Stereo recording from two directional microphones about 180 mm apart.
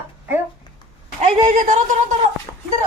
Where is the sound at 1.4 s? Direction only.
45° right (ahead or behind).